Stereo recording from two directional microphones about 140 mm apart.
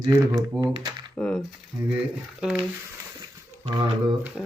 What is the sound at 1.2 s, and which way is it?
Speech, 5° left (ahead or behind).